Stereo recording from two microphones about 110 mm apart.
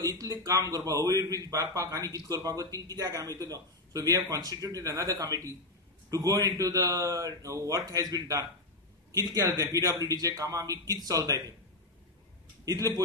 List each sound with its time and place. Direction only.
0.0 s a man's voice: 35° right (ahead or behind)
12.6 s a man's voice: 35° right (ahead or behind)